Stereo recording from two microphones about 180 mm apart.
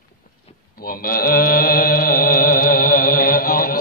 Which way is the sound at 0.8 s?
55° left (ahead or behind).